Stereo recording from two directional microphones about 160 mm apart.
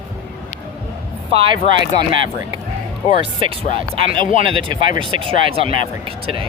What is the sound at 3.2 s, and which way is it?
Speech, 35° right (ahead or behind).